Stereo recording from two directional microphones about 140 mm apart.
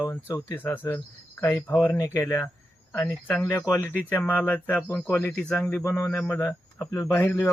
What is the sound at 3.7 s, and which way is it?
Speech, 15° left (ahead or behind).